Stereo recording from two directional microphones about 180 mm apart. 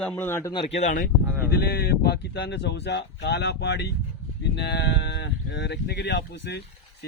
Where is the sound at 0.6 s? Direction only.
40° left (ahead or behind).